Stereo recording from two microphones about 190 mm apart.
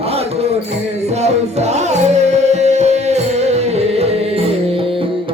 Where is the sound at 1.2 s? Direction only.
35° right (ahead or behind).